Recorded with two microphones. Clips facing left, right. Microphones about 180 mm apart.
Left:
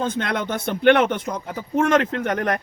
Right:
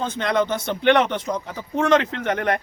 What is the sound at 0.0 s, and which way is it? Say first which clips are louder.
Speech: right 2 dB; 55° left (ahead or behind).